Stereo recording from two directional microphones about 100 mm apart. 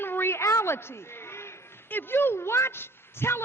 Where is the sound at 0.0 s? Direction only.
20° left (ahead or behind).